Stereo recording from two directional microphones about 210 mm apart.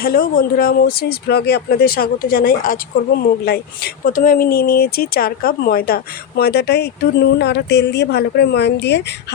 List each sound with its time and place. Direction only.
0.0 s speech: 45° left (ahead or behind)